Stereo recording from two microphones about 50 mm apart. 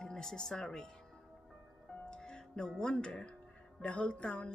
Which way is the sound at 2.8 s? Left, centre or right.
Centre.